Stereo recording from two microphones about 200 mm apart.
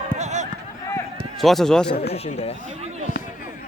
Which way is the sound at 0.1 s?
35° right (ahead or behind).